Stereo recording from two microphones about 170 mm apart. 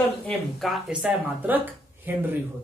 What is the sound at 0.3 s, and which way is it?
Speech, centre (ahead or behind).